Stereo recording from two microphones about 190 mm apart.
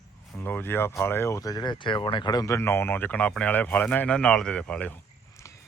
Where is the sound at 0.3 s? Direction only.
10° left (ahead or behind).